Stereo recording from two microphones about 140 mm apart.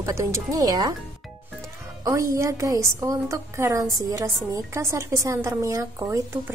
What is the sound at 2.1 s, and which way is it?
A woman's voice, 20° right (ahead or behind).